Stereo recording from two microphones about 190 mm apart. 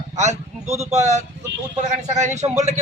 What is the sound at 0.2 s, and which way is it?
Speech, 35° right (ahead or behind).